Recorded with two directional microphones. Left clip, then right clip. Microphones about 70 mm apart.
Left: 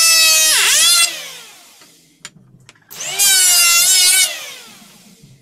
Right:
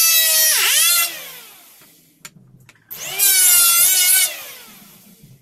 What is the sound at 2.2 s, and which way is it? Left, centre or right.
Vehicle, centre.